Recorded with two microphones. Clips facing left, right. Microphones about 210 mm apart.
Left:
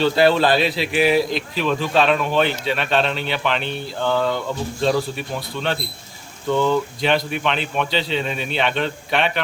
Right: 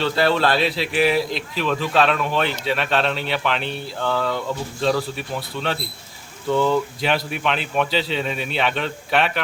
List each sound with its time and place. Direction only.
0.0 s speech: centre (ahead or behind)